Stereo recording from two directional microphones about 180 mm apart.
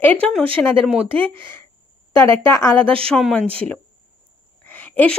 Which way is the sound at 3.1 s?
5° left (ahead or behind).